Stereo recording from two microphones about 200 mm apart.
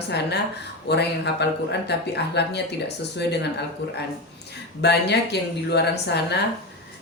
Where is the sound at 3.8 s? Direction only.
55° left (ahead or behind).